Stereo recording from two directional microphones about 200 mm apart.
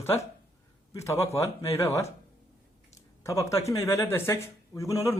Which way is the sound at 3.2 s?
15° left (ahead or behind).